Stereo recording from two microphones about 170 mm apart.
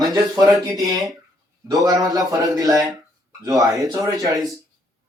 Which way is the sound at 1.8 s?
20° right (ahead or behind).